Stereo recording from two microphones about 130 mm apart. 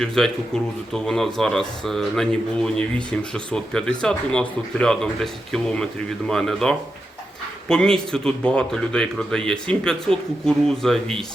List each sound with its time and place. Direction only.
0.0 s speech: 5° left (ahead or behind)